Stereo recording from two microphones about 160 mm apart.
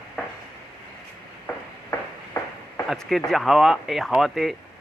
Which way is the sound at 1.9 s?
20° left (ahead or behind).